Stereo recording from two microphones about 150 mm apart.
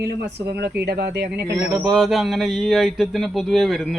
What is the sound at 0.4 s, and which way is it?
Speech, 90° right.